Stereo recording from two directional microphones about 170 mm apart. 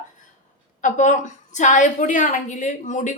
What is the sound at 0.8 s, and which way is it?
A woman's voice, 45° left (ahead or behind).